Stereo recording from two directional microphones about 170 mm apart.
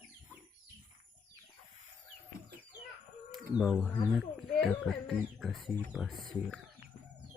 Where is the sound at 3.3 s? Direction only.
Centre (ahead or behind).